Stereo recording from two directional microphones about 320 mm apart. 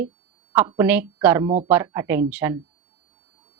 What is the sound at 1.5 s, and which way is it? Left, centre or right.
Speech, right.